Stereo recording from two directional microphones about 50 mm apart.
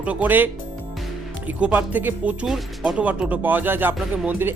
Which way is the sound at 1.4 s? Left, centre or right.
Right.